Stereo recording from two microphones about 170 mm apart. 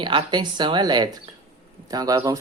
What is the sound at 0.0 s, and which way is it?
Speech, 30° right (ahead or behind).